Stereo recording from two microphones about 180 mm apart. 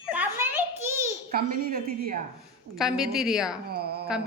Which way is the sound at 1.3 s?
55° right (ahead or behind).